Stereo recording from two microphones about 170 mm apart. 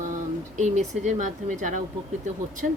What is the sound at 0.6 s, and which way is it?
Speech, 45° right (ahead or behind).